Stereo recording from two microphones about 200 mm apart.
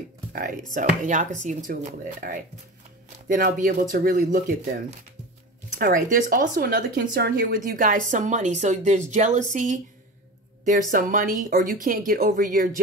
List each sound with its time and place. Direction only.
0.3 s speech: 45° right (ahead or behind)
5.8 s speech: 40° right (ahead or behind)